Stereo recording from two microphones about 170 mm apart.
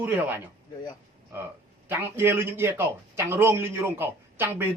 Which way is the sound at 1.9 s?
10° right (ahead or behind).